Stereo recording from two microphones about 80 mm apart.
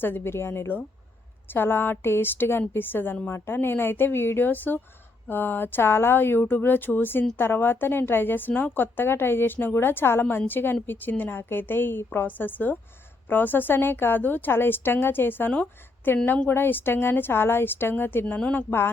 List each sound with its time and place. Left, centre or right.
0.0 s a woman's voice: left
18.3 s speech: centre